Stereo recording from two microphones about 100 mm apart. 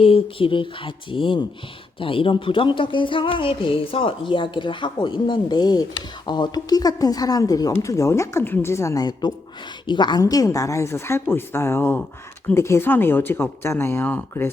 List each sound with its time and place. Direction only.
0.0 s speech: 70° left (ahead or behind); by 10.2 s 50° left (ahead or behind)
10.2 s speech: 40° left (ahead or behind); by 14.5 s 20° left (ahead or behind)